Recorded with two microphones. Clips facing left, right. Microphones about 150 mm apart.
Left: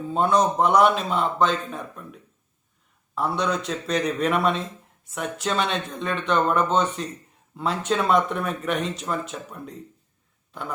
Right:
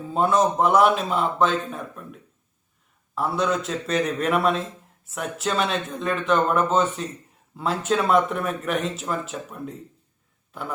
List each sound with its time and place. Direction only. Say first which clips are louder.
0.0 s a man's voice: even; centre (ahead or behind)